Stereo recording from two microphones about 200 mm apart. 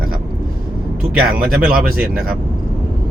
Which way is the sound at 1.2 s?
50° right (ahead or behind).